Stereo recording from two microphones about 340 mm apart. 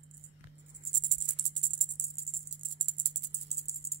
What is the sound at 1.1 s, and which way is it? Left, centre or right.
Music, right.